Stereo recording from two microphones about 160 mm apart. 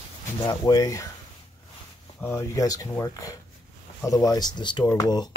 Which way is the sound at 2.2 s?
20° left (ahead or behind).